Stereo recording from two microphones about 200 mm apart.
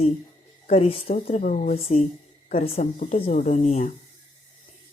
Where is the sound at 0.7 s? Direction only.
30° left (ahead or behind).